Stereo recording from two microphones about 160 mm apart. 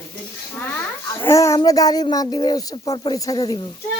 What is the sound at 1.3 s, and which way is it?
Speech, 20° left (ahead or behind).